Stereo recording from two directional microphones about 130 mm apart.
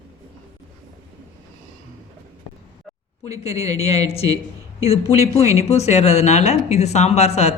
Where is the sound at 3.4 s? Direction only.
55° left (ahead or behind).